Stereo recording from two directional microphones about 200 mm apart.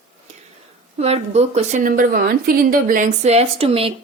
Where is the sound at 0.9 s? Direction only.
30° right (ahead or behind).